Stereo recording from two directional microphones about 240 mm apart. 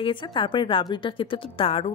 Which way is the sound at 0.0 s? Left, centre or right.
Centre.